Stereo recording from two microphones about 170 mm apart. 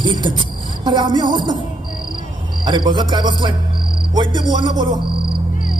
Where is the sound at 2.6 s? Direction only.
25° right (ahead or behind).